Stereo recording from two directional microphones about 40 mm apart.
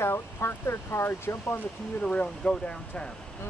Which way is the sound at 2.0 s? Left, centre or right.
Left.